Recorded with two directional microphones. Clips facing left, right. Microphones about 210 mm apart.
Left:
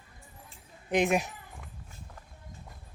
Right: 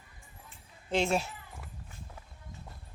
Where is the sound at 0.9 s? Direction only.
15° left (ahead or behind).